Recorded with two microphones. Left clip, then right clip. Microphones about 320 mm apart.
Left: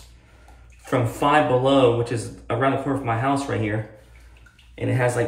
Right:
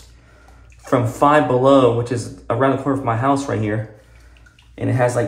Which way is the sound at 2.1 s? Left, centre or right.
Right.